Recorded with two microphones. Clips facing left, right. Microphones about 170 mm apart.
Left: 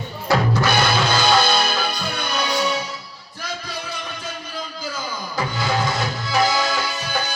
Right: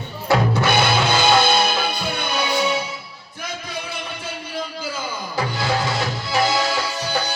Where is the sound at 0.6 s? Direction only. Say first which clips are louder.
Right 1 dB; 25° right (ahead or behind).